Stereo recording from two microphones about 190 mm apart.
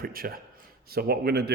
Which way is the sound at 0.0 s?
50° right (ahead or behind).